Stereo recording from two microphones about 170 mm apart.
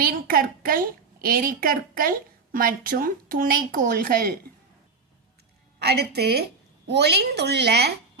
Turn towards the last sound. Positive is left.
turn(degrees=-75)  # may be behind; listen again after turning